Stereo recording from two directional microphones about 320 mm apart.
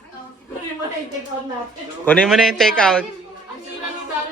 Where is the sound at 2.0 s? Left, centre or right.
Centre.